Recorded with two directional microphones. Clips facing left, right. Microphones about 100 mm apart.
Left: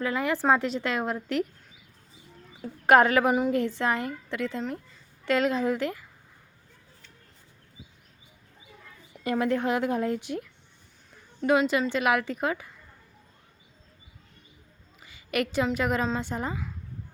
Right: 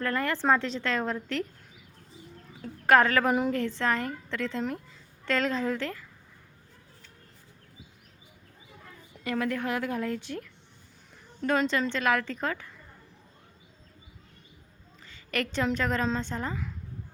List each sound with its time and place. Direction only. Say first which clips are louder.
0.0 s a woman's voice: left 2 dB; 10° left (ahead or behind)
2.6 s a woman's voice: left 2 dB; 20° left (ahead or behind)
9.2 s a woman's voice: left 4 dB; 20° left (ahead or behind)
15.0 s a woman's voice: left 3 dB; 10° left (ahead or behind)